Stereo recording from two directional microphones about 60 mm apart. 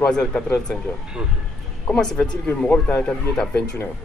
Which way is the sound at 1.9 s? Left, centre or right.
Centre.